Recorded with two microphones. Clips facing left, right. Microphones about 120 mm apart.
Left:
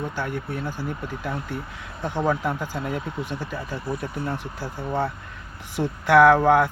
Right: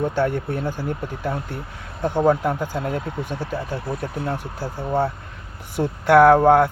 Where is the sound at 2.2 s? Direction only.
40° right (ahead or behind).